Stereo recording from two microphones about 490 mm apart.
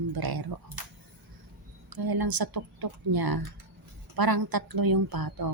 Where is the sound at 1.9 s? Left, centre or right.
Right.